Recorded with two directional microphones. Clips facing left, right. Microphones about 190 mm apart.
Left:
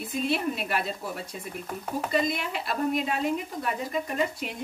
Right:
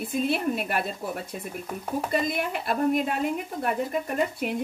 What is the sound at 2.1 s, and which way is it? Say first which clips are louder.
Speech: even; 50° right (ahead or behind).